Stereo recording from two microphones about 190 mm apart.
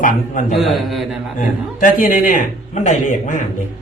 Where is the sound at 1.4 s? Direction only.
45° left (ahead or behind).